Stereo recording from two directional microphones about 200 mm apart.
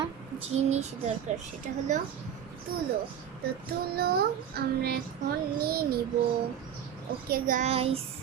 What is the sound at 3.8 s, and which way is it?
Child singing, 50° right (ahead or behind).